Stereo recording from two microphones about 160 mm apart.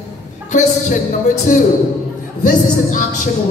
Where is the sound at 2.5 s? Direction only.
55° left (ahead or behind).